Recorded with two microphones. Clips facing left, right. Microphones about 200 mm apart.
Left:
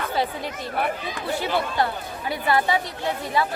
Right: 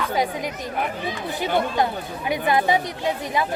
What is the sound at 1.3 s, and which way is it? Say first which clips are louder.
Speech: right 1 dB; 20° right (ahead or behind).